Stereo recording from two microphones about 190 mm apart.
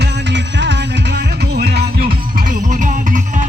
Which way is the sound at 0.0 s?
65° right (ahead or behind).